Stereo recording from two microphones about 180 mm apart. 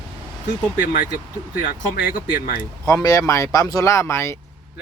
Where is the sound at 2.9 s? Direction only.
20° left (ahead or behind).